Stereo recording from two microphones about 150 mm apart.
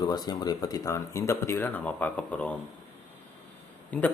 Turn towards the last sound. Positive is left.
turn(degrees=10)  # may be behind; listen again after turning